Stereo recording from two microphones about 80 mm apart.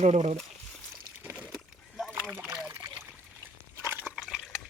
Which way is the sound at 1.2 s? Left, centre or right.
Right.